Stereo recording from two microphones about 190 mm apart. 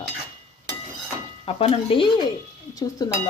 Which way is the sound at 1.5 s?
30° left (ahead or behind).